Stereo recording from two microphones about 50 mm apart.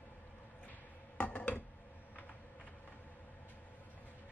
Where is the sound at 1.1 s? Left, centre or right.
Left.